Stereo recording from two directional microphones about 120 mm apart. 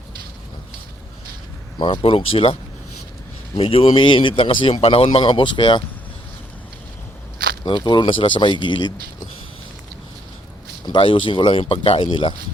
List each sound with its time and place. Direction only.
1.8 s speech: 50° left (ahead or behind)
7.6 s speech: 40° left (ahead or behind)
10.8 s speech: 45° left (ahead or behind)